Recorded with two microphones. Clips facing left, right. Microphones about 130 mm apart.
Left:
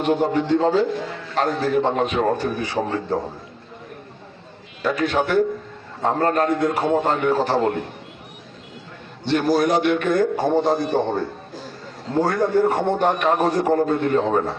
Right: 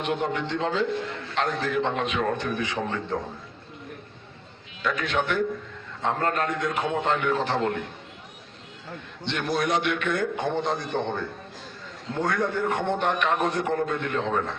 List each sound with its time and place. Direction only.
0.0 s a man's voice: 35° left (ahead or behind)
4.8 s a man's voice: 35° left (ahead or behind)
9.2 s a man's voice: 35° left (ahead or behind)